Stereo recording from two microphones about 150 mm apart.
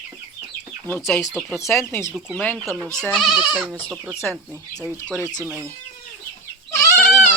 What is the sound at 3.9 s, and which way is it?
Speech, 15° right (ahead or behind).